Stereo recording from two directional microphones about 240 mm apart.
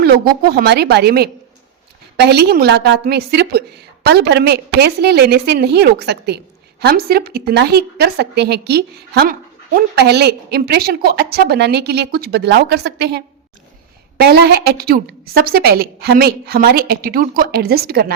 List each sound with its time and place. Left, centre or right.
0.4 s a woman's voice: right